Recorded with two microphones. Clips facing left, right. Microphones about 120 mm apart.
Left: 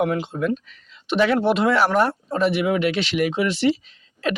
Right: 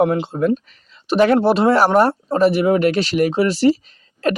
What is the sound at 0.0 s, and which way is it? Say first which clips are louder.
Speech: right 5 dB; 35° right (ahead or behind).